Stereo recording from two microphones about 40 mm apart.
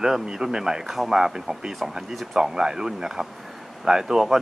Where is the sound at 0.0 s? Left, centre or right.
Centre.